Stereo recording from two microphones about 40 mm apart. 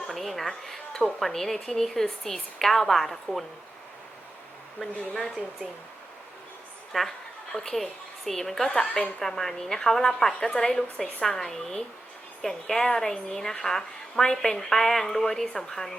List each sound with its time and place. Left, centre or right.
0.1 s a woman's voice: centre
4.8 s speech: centre
6.9 s a woman's voice: centre
8.8 s a woman's voice: left
9.2 s a woman's voice: centre